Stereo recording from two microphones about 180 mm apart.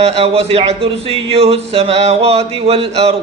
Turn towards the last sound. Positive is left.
turn(degrees=-35)  # may be behind; listen again after turning